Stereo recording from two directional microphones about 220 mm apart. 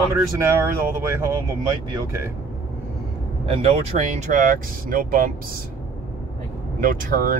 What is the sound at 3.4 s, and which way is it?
Speech, 25° right (ahead or behind).